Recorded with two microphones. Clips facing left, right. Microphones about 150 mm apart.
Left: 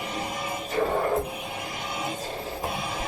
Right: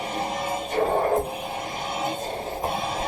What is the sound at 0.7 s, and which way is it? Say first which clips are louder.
Music: right 2 dB; 35° right (ahead or behind).